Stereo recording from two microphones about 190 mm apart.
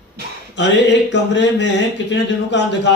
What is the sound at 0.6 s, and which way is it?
A man's voice, 65° left (ahead or behind).